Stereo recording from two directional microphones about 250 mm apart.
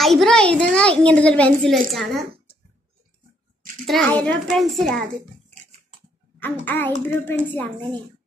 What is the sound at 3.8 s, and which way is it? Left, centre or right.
A child's voice, centre.